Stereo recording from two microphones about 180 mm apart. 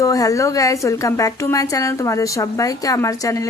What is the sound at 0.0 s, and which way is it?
Speech, 20° left (ahead or behind).